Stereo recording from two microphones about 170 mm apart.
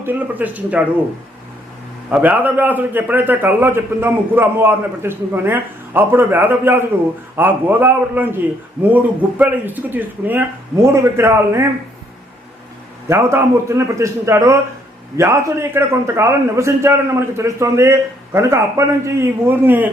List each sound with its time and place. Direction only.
0.0 s a man's voice: 10° right (ahead or behind)
2.0 s a man's voice: 10° right (ahead or behind)
13.1 s a man's voice: 15° right (ahead or behind)